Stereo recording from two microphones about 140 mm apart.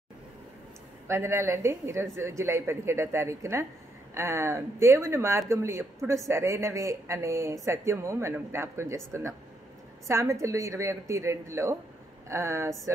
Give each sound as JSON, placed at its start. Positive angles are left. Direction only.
{"t": 1.0, "sound": "speech", "side_deg": -20}